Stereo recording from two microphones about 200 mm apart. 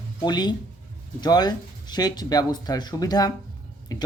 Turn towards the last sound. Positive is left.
turn(degrees=20)  # may be behind; listen again after turning